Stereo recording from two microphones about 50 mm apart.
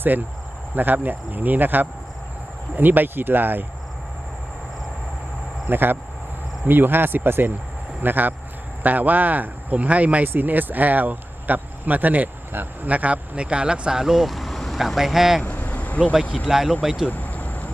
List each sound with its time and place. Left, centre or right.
0.1 s speech: right
5.6 s speech: right
10.2 s speech: right; by 15.4 s centre
15.4 s a sound: left
16.5 s speech: centre
17.1 s vehicle: left